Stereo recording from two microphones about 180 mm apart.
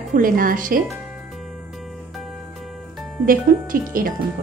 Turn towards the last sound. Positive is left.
turn(degrees=-50)  # may be behind; listen again after turning